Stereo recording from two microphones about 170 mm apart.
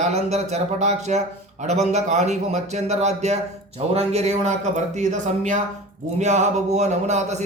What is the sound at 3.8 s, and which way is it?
Mantra, 40° right (ahead or behind).